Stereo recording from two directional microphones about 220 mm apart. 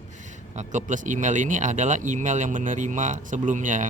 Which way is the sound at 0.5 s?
35° right (ahead or behind).